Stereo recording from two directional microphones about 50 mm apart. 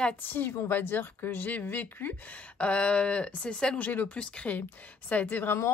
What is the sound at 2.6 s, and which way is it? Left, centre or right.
A woman's voice, left.